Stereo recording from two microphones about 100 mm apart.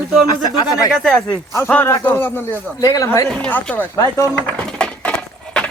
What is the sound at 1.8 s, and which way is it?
Speech, 20° left (ahead or behind).